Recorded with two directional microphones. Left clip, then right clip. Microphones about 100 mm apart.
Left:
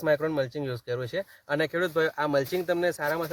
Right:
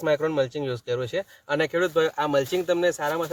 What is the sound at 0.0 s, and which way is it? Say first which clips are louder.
Speech: right 3 dB; 75° right (ahead or behind).